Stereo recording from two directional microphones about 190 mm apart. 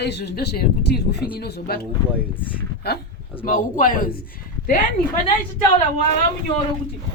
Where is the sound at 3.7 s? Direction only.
45° left (ahead or behind).